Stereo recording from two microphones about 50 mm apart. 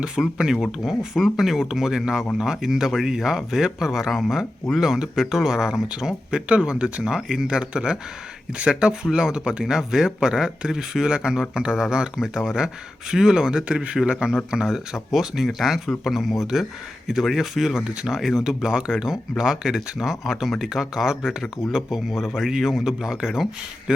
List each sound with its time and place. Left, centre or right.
0.0 s a man's voice: centre